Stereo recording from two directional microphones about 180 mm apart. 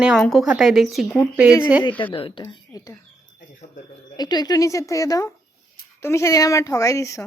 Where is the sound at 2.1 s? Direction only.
30° left (ahead or behind).